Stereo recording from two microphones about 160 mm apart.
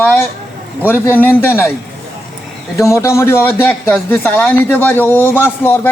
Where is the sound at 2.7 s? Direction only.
20° left (ahead or behind).